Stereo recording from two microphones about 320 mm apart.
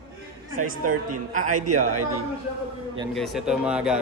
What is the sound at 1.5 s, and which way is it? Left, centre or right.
Speech, right.